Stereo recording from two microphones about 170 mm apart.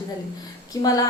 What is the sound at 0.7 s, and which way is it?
Speech, 20° left (ahead or behind).